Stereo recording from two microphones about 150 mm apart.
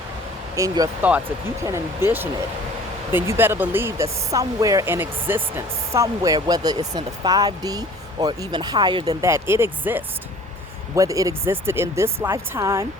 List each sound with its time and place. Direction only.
0.5 s speech: 20° right (ahead or behind)
9.2 s speech: 15° right (ahead or behind)